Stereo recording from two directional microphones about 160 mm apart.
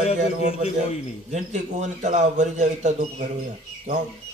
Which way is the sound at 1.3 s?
50° right (ahead or behind).